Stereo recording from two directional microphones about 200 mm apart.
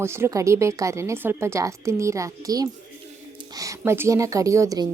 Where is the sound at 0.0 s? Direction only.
15° right (ahead or behind).